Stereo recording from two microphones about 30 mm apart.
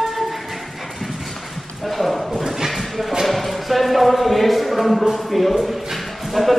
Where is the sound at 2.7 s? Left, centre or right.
Centre.